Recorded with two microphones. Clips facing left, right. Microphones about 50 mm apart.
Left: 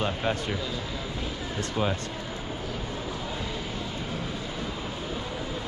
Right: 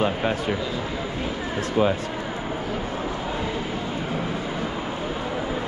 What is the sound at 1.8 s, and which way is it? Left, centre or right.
Speech, centre.